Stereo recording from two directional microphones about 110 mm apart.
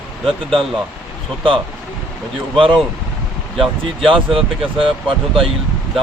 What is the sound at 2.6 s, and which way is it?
Speech, 50° right (ahead or behind).